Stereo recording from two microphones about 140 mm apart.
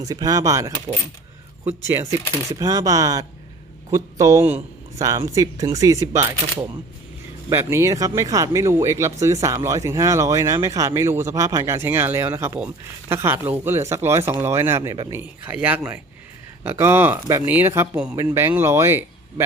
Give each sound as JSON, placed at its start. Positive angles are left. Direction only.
{"t": 0.0, "sound": "speech", "side_deg": -25}
{"t": 1.9, "sound": "speech", "side_deg": -20}
{"t": 7.5, "sound": "speech", "side_deg": -20}
{"t": 15.1, "sound": "speech", "side_deg": -10}